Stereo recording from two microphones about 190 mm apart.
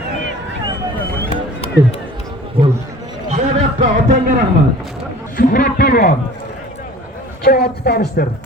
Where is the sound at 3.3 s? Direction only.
40° right (ahead or behind).